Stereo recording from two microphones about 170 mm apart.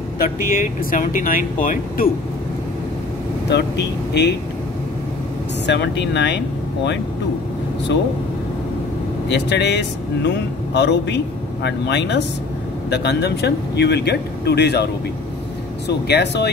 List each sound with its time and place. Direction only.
0.2 s speech: 55° left (ahead or behind)
3.4 s speech: 85° left
5.7 s a man's voice: 90° left
9.3 s a man's voice: 90° left
15.9 s speech: 80° left